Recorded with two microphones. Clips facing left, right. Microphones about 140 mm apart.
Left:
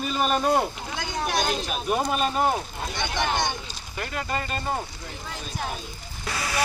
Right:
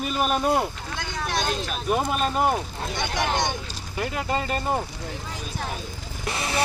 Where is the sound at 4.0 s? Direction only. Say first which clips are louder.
Right 3 dB; 20° right (ahead or behind).